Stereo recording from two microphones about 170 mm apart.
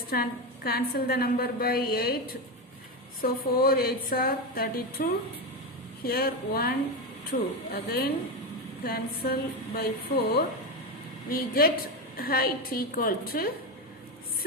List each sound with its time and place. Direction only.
0.1 s a woman's voice: 65° left (ahead or behind)
3.2 s a woman's voice: 60° left (ahead or behind)
11.3 s a woman's voice: 60° left (ahead or behind)